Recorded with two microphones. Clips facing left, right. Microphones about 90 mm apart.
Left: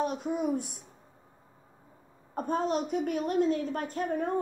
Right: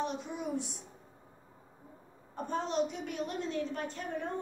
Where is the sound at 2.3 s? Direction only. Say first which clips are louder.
Left 4 dB; 50° left (ahead or behind).